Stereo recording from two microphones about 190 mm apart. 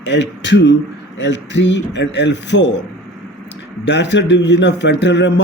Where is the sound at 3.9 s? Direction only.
65° left (ahead or behind).